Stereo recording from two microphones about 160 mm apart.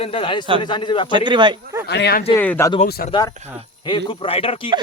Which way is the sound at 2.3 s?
10° left (ahead or behind).